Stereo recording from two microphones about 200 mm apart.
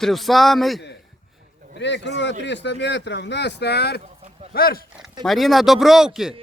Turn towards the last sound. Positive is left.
turn(degrees=0)  # may be behind; listen again after turning